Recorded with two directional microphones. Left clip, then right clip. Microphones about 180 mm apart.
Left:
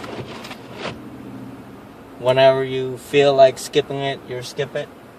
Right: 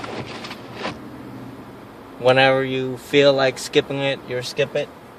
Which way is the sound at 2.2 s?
30° right (ahead or behind).